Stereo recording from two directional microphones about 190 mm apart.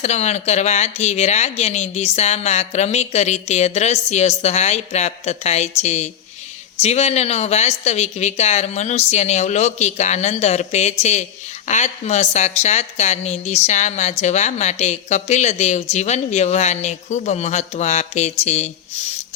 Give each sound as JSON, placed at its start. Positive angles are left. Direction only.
{"t": 0.0, "sound": "a woman's voice", "side_deg": 35}